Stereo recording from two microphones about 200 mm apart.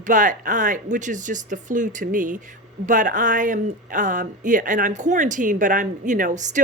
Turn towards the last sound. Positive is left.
turn(degrees=-40)  # may be behind; listen again after turning